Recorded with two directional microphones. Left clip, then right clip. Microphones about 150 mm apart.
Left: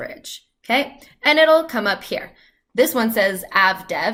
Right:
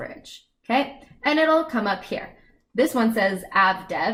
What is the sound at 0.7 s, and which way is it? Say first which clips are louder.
A woman's voice: left 3 dB; 20° left (ahead or behind).